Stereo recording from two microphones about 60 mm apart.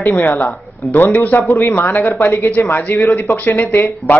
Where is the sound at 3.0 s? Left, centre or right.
Left.